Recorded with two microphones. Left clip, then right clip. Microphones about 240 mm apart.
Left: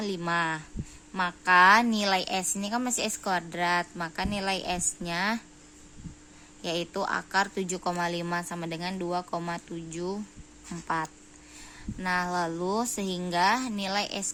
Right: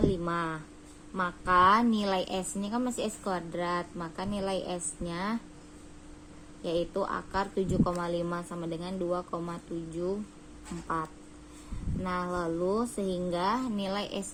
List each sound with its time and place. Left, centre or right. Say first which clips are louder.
0.1 s a woman's voice: left 3 dB; left
6.6 s a woman's voice: even; left